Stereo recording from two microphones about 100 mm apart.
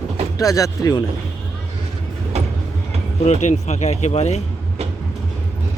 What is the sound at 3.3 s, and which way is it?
Speech, 90° left.